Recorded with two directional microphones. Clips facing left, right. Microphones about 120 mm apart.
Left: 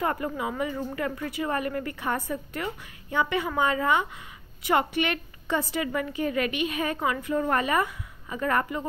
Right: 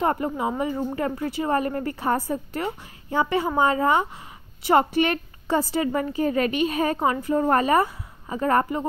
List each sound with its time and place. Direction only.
0.0 s a woman's voice: 30° right (ahead or behind)